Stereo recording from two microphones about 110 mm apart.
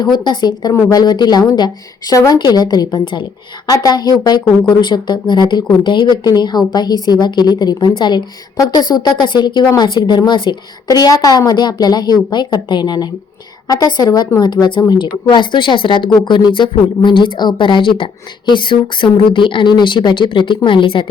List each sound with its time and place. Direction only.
0.0 s a woman's voice: 40° left (ahead or behind)
10.8 s a woman's voice: 35° left (ahead or behind); by 21.1 s 55° left (ahead or behind)